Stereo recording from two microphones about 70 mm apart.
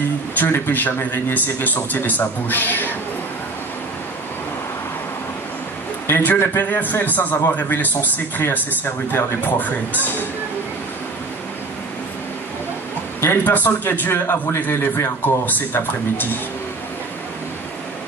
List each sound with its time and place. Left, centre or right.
0.4 s a man's voice: left
6.0 s a man's voice: left
13.4 s a man's voice: left